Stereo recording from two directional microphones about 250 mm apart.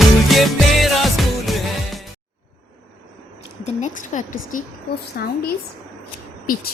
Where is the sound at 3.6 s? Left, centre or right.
Left.